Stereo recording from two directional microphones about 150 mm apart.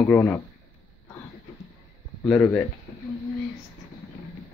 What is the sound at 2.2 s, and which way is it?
Speech, 5° left (ahead or behind).